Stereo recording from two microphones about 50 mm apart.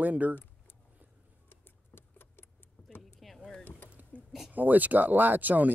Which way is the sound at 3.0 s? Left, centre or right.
Centre.